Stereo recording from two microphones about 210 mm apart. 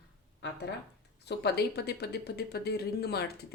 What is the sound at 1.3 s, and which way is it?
Speech, 50° left (ahead or behind).